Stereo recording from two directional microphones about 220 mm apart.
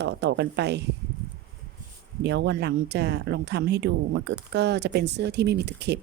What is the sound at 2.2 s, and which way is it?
A woman's voice, 50° right (ahead or behind).